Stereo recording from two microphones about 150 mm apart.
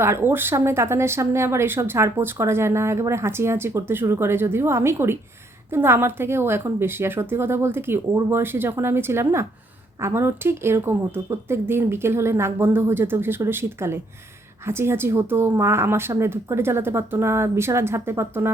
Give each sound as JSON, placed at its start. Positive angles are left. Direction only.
{"t": 0.0, "sound": "speech", "side_deg": -15}